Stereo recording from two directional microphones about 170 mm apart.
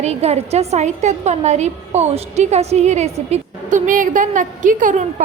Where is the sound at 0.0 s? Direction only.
40° right (ahead or behind).